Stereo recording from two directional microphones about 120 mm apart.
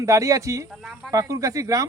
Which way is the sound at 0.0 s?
25° right (ahead or behind).